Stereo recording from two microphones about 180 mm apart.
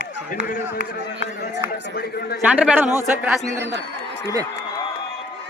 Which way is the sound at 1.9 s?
60° left (ahead or behind).